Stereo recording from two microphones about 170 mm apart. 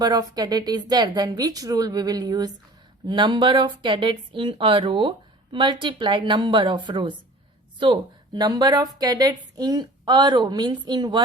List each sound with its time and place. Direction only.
0.0 s speech: 20° right (ahead or behind)